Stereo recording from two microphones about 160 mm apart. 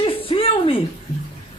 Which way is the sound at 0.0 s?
35° left (ahead or behind).